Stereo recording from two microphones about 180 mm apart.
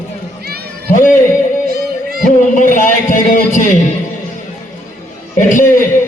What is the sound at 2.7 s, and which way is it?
A man's voice, 45° left (ahead or behind).